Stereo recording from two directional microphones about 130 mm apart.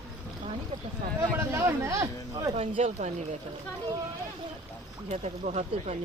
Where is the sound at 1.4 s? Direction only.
20° right (ahead or behind).